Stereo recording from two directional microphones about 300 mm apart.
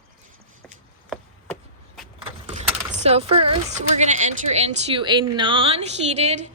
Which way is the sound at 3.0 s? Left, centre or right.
Centre.